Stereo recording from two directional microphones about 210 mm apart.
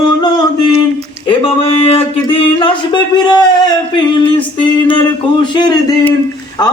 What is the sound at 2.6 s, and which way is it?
A man's voice, 20° left (ahead or behind).